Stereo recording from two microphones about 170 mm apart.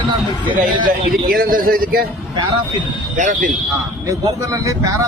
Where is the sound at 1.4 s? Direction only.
55° right (ahead or behind).